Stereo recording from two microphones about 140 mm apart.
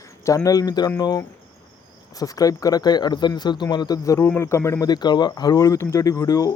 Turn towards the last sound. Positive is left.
turn(degrees=25)  # may be behind; listen again after turning